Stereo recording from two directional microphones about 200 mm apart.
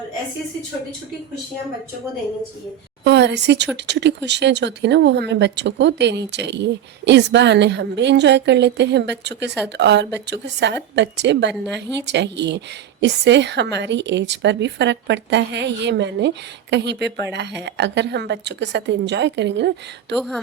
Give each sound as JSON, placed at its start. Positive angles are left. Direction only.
{"t": 3.0, "sound": "a woman's voice", "side_deg": -60}
{"t": 20.1, "sound": "a woman's voice", "side_deg": 0}